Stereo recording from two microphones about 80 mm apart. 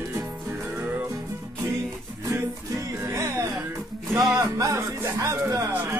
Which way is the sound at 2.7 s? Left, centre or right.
Right.